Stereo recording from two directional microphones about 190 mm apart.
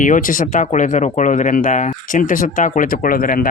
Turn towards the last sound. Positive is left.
turn(degrees=45)  # may be behind; listen again after turning